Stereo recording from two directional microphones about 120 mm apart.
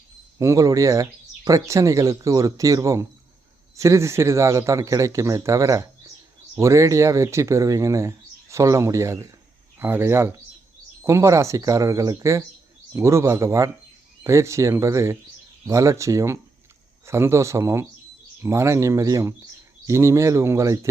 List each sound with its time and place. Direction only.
0.3 s speech: 25° right (ahead or behind)